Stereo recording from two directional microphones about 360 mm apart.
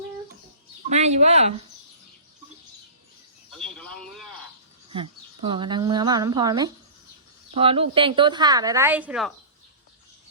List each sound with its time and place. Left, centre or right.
0.9 s speech: centre
3.6 s a sound: centre
4.9 s a woman's voice: centre